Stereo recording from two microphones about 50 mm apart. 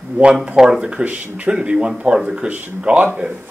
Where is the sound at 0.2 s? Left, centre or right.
Right.